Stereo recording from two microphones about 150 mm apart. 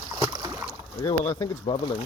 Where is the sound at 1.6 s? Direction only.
30° left (ahead or behind).